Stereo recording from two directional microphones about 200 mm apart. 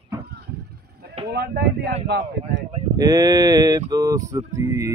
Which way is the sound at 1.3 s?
55° right (ahead or behind).